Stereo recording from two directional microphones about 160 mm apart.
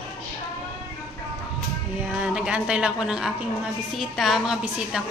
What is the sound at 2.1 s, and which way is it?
A woman's voice, 5° right (ahead or behind).